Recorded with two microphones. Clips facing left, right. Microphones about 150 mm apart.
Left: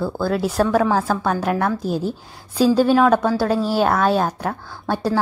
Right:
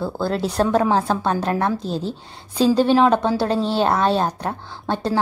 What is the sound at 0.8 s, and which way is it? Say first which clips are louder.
Speech: even; 20° right (ahead or behind).